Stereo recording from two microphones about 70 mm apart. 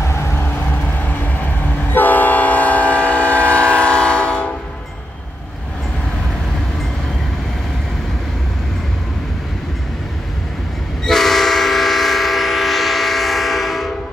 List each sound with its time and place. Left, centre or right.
0.0 s vehicle: left
0.5 s vehicle: left
1.9 s train: left
11.1 s train: centre